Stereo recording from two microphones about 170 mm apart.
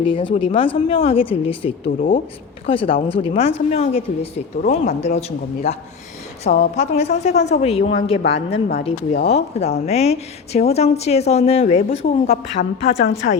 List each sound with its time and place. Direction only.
0.0 s a woman's voice: 30° left (ahead or behind)
2.0 s speech: 55° left (ahead or behind)
2.6 s a woman's voice: 30° left (ahead or behind)